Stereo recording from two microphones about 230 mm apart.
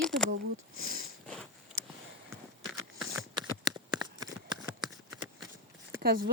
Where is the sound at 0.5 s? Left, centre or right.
Right.